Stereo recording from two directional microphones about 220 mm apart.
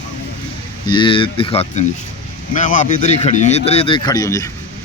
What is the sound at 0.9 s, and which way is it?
Speech, 20° left (ahead or behind).